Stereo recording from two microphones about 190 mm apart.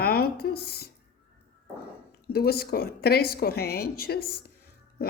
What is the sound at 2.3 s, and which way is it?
Speech, 55° left (ahead or behind).